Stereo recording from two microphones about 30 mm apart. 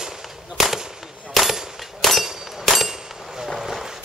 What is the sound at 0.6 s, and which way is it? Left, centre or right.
Fireworks, centre.